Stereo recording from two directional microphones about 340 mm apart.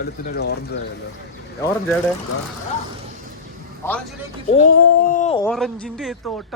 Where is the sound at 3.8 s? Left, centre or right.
Centre.